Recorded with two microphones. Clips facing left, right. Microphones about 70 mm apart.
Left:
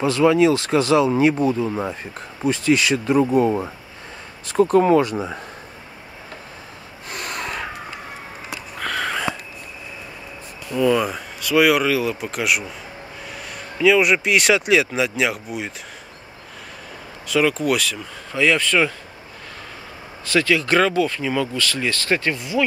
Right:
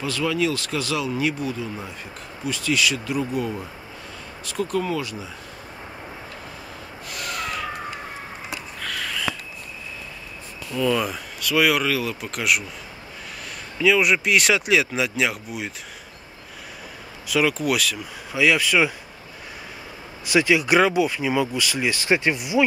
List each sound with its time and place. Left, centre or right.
0.0 s speech: left
7.1 s snort: left
8.8 s a sound: left
10.9 s speech: centre
13.7 s speech: centre
17.3 s speech: centre
20.2 s speech: centre